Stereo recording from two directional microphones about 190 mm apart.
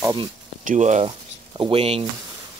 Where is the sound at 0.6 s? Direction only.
40° right (ahead or behind).